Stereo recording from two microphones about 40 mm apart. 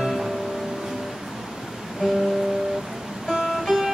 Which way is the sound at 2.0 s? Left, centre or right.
Centre.